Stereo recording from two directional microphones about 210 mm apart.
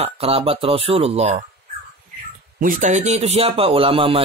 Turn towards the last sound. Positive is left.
turn(degrees=-25)  # may be behind; listen again after turning